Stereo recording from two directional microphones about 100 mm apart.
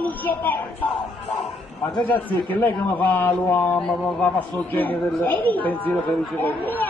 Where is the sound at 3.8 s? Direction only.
10° left (ahead or behind).